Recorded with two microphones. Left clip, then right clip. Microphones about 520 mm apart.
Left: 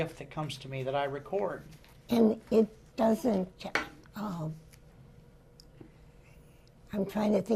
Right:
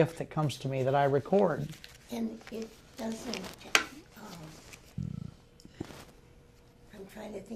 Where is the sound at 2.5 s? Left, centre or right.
Left.